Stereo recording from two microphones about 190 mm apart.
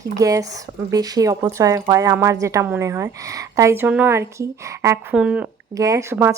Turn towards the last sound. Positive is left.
turn(degrees=-15)  # may be behind; listen again after turning